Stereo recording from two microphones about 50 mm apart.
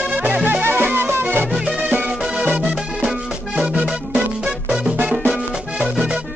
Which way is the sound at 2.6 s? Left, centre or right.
Centre.